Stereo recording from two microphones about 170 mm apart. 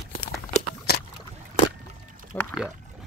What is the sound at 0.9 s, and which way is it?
Boat, 70° left (ahead or behind).